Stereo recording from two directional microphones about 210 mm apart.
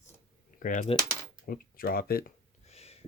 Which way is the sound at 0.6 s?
40° left (ahead or behind).